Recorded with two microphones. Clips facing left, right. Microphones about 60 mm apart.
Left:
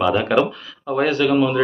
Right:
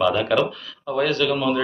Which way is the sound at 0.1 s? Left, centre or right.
Centre.